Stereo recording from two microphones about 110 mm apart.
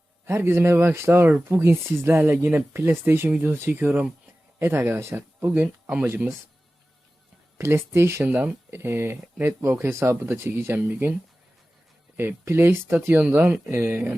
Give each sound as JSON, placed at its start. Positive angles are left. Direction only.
{"t": 0.3, "sound": "speech", "side_deg": -25}
{"t": 7.6, "sound": "speech", "side_deg": -25}
{"t": 12.1, "sound": "speech", "side_deg": -20}